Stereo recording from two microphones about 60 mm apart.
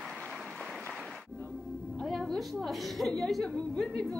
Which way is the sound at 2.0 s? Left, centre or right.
Centre.